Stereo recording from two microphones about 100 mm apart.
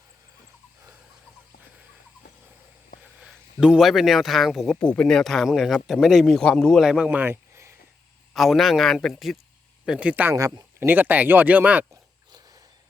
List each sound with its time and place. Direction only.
3.0 s speech: 5° right (ahead or behind)
4.8 s speech: 10° left (ahead or behind); by 7.3 s 15° right (ahead or behind)
7.5 s a sound: 30° right (ahead or behind)
8.3 s speech: centre (ahead or behind)
10.3 s a man's voice: 35° right (ahead or behind)
10.8 s speech: 20° right (ahead or behind)